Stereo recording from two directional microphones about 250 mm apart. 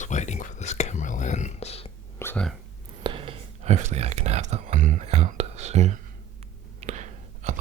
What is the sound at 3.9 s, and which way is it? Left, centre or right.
Speech, right.